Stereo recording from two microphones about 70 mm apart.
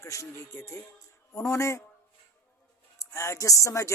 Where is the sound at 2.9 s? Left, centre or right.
Left.